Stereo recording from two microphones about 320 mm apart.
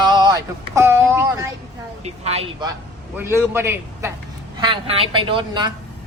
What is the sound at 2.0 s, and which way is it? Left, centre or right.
Speech, centre.